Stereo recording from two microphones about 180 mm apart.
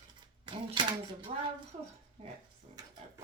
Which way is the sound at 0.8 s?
25° right (ahead or behind).